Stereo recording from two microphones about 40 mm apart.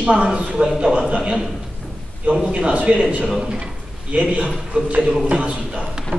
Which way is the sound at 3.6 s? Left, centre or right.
Right.